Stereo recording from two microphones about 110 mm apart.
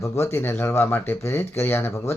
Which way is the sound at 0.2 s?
25° left (ahead or behind).